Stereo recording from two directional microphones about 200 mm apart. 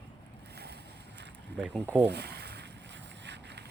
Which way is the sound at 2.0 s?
55° right (ahead or behind).